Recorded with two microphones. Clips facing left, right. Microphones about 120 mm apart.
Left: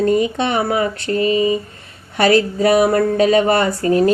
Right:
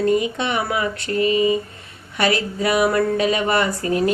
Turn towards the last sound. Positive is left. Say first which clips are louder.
# left 5 dB
turn(degrees=35)  # may be behind; listen again after turning